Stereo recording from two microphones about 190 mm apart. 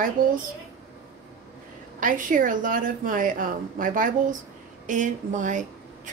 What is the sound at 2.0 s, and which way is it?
A woman's voice, 45° right (ahead or behind).